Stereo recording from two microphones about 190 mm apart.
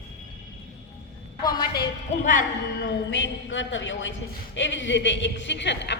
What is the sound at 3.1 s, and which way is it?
A woman's voice, 75° left (ahead or behind).